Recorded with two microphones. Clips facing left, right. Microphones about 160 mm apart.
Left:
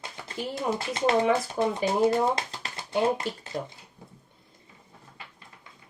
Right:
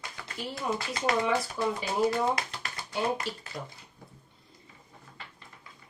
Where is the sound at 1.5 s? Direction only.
25° left (ahead or behind).